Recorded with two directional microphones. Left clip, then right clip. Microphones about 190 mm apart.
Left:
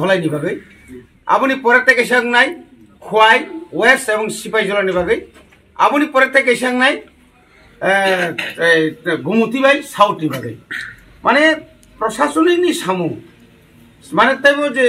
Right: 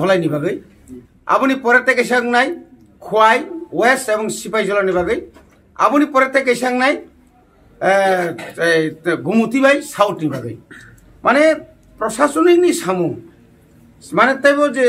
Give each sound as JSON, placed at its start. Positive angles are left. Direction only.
{"t": 0.0, "sound": "speech", "side_deg": -20}
{"t": 14.1, "sound": "speech", "side_deg": -25}